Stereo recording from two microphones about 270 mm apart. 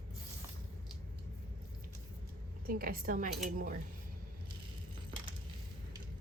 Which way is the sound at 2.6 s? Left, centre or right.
Right.